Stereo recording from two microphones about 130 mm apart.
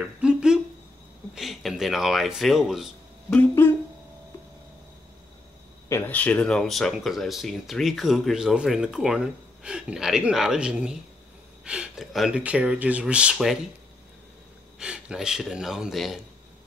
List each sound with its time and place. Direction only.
0.2 s a sound: 5° right (ahead or behind)
1.3 s speech: centre (ahead or behind)
3.3 s speech: 15° left (ahead or behind)
5.9 s speech: 15° left (ahead or behind); by 13.6 s 5° right (ahead or behind)
14.8 s speech: 5° right (ahead or behind)